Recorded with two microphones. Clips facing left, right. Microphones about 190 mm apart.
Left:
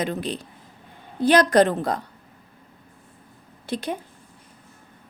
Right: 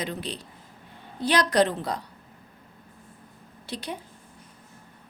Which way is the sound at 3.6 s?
50° left (ahead or behind).